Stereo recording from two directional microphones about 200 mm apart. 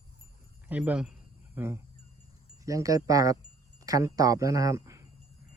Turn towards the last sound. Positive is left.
turn(degrees=-15)  # may be behind; listen again after turning